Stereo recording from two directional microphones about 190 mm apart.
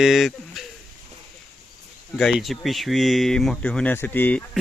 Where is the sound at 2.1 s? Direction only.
Centre (ahead or behind).